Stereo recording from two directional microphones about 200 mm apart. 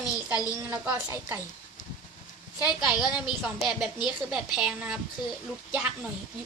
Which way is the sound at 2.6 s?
5° right (ahead or behind).